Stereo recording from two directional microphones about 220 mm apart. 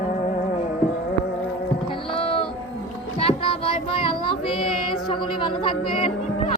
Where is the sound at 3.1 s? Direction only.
25° left (ahead or behind).